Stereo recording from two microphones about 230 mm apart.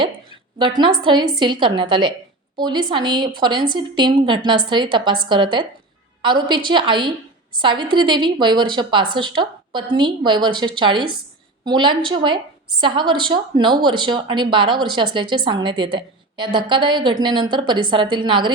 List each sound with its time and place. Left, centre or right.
1.0 s a woman's voice: centre